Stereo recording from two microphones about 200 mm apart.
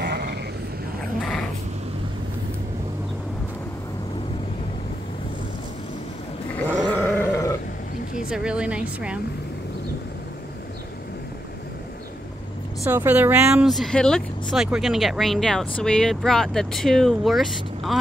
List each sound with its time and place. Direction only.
0.0 s sheep: 55° right (ahead or behind)
6.9 s goat: 10° left (ahead or behind)
8.3 s speech: 5° right (ahead or behind)
12.8 s speech: 10° right (ahead or behind)